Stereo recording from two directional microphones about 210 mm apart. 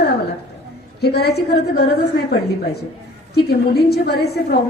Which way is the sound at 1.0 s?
50° left (ahead or behind).